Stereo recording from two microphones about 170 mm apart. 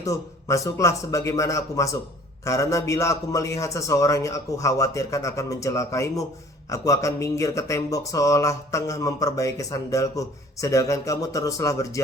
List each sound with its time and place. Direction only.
0.0 s speech: 20° left (ahead or behind)